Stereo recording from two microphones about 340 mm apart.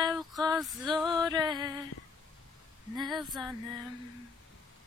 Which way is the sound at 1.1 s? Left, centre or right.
Centre.